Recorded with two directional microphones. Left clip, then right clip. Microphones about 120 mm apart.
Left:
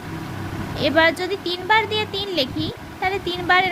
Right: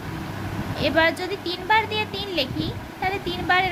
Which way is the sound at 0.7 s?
35° left (ahead or behind).